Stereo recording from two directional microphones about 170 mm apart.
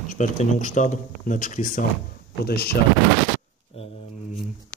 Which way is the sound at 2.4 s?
65° left (ahead or behind).